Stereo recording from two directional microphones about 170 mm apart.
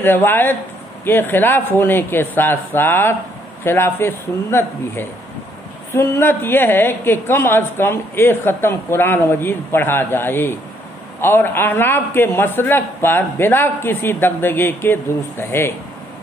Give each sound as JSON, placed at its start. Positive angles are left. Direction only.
{"t": 0.0, "sound": "a woman's voice", "side_deg": 10}